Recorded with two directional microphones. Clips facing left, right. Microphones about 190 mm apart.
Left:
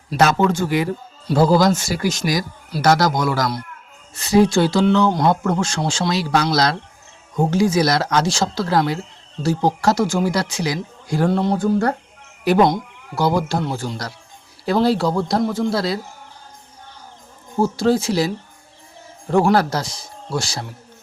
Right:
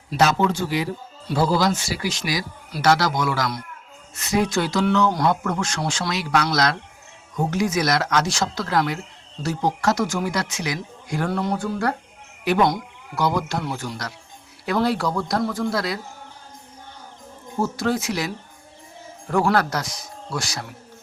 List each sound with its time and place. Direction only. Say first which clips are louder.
0.1 s a man's voice: left 3 dB; 50° left (ahead or behind)
12.6 s speech: left 4 dB; 25° left (ahead or behind)
17.6 s speech: left 6 dB; 30° left (ahead or behind)
19.3 s speech: left 4 dB; 25° left (ahead or behind)